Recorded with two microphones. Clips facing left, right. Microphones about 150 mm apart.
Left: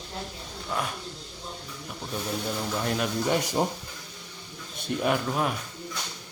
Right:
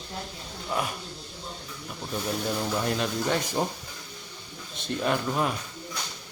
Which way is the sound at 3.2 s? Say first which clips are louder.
Left 3 dB; 15° left (ahead or behind).